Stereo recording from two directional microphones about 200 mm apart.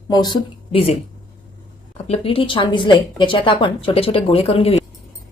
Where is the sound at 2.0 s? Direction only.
30° left (ahead or behind).